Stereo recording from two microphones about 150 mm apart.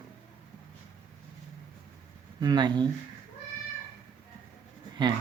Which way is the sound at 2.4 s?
30° right (ahead or behind).